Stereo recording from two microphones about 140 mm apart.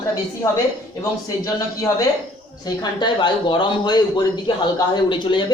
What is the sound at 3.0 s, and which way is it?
Speech, 35° left (ahead or behind).